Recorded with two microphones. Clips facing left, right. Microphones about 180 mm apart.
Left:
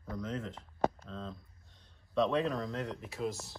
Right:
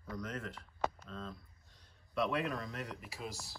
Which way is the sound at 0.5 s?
35° left (ahead or behind).